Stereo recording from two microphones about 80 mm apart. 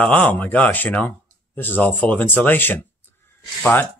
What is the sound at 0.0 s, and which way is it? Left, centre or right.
Speech, centre.